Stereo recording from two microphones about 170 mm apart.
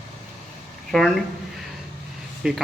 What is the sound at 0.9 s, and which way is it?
Speech, centre (ahead or behind).